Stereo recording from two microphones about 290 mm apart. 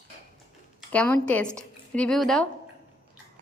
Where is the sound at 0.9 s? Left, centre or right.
Centre.